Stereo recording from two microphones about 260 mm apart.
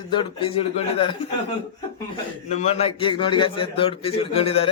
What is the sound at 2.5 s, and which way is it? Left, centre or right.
A man's voice, left.